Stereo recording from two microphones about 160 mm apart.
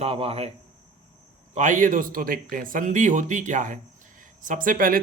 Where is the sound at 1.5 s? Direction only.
50° right (ahead or behind).